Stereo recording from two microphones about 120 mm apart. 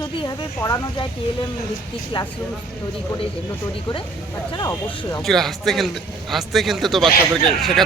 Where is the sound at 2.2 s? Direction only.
45° left (ahead or behind).